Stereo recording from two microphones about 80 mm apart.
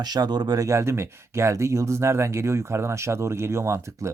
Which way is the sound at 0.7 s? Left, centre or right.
Right.